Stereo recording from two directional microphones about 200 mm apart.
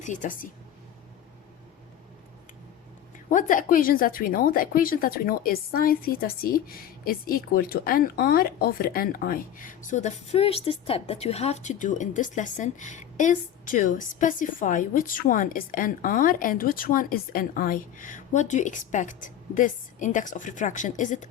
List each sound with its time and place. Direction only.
0.0 s a woman's voice: 40° left (ahead or behind)
3.2 s speech: 40° left (ahead or behind)